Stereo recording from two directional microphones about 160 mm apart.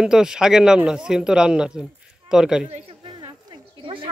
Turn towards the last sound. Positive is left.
turn(degrees=-30)  # may be behind; listen again after turning